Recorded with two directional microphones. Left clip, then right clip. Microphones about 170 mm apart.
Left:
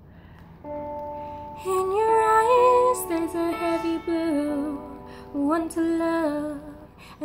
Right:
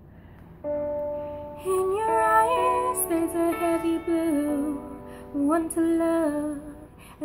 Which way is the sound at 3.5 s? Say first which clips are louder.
Right 1 dB; 40° right (ahead or behind).